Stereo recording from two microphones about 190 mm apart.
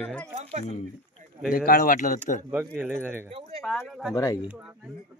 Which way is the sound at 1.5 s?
50° left (ahead or behind).